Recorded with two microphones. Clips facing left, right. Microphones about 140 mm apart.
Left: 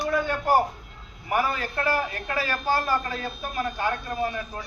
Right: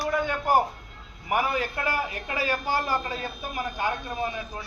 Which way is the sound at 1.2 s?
15° right (ahead or behind).